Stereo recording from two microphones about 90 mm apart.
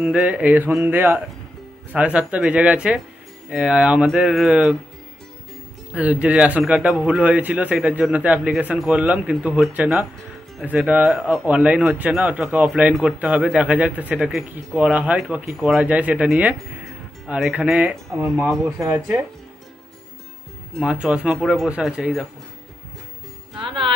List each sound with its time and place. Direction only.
0.0 s speech: 10° right (ahead or behind)
5.9 s speech: 15° right (ahead or behind)
15.8 s speech: 15° right (ahead or behind)
17.3 s speech: 15° right (ahead or behind)
18.7 s speech: 35° right (ahead or behind)
20.8 s speech: 10° right (ahead or behind)